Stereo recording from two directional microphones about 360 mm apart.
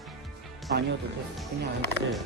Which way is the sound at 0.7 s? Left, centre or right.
Right.